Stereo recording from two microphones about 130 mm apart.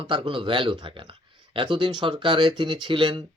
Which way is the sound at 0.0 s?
40° right (ahead or behind).